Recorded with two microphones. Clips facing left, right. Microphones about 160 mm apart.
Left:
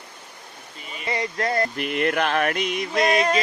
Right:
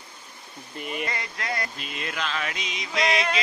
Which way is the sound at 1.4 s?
40° left (ahead or behind).